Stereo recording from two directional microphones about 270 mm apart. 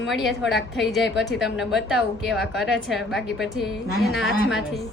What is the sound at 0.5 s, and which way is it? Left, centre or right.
A woman's voice, centre.